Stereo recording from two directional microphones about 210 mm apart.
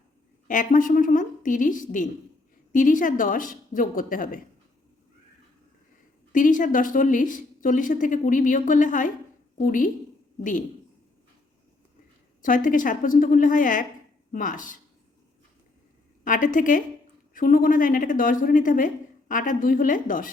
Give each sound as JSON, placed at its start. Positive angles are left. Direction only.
{"t": 0.4, "sound": "a woman's voice", "side_deg": 40}
{"t": 6.3, "sound": "a woman's voice", "side_deg": 40}
{"t": 12.4, "sound": "a woman's voice", "side_deg": 40}
{"t": 16.2, "sound": "a woman's voice", "side_deg": 40}